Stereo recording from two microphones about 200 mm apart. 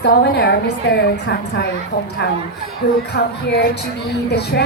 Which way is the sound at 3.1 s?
55° left (ahead or behind).